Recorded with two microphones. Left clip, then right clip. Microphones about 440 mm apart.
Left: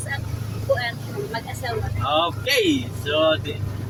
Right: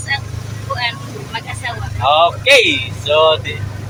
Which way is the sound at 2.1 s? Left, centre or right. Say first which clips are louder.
Right 10 dB; left.